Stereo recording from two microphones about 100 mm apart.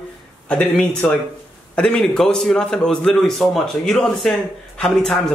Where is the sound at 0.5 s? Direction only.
15° left (ahead or behind).